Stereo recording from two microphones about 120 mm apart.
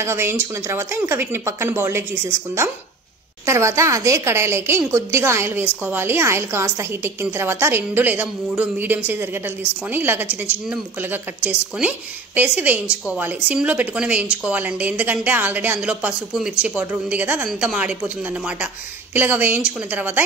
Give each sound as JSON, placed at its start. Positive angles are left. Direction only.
{"t": 0.0, "sound": "a woman's voice", "side_deg": -20}
{"t": 19.1, "sound": "a woman's voice", "side_deg": -15}